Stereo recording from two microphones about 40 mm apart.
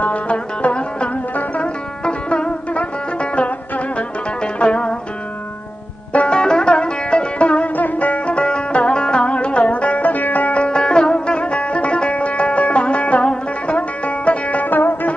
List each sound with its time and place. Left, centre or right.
0.0 s music: left
4.6 s zither: left
6.1 s music: left
7.7 s music: left